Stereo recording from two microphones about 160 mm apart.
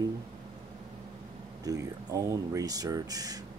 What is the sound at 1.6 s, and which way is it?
Speech, 20° right (ahead or behind).